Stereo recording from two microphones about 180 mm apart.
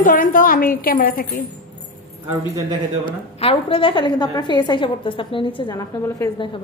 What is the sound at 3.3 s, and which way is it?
A woman's voice, 30° left (ahead or behind).